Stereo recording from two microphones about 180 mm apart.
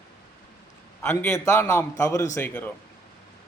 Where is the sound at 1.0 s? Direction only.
15° left (ahead or behind).